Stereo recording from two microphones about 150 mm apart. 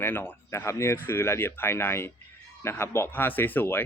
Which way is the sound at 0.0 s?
15° left (ahead or behind).